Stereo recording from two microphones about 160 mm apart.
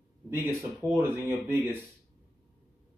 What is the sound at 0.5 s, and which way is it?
Speech, 15° right (ahead or behind).